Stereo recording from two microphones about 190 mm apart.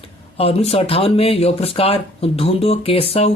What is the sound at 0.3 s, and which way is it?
Speech, 30° left (ahead or behind).